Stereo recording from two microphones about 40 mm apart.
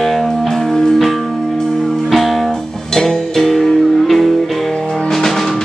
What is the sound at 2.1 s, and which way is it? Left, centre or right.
Music, centre.